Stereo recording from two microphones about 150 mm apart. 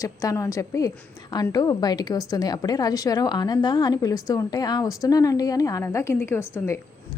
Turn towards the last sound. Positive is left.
turn(degrees=15)  # may be behind; listen again after turning